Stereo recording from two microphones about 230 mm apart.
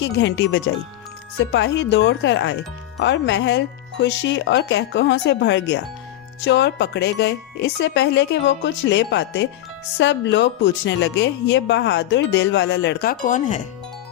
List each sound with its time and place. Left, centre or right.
0.0 s speech: left